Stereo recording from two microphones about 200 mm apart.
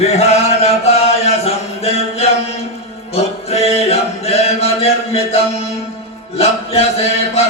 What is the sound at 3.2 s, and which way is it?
Music, 30° left (ahead or behind).